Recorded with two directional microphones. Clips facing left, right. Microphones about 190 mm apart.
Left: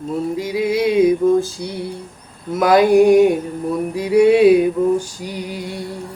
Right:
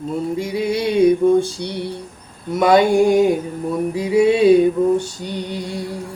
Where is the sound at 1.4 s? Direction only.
30° right (ahead or behind).